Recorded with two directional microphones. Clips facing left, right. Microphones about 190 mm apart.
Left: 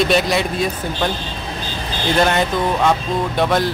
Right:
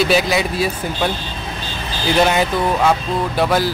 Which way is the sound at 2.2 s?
5° right (ahead or behind).